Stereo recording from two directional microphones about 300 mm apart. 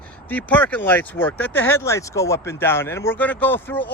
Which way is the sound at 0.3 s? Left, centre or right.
Centre.